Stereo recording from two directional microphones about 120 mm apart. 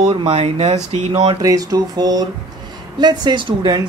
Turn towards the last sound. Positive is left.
turn(degrees=-35)  # may be behind; listen again after turning